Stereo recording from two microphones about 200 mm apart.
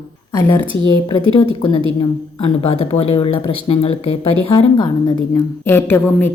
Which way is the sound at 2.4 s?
30° left (ahead or behind).